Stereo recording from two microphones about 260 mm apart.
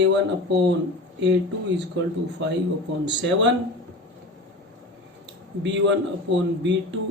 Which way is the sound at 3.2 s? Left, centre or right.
Right.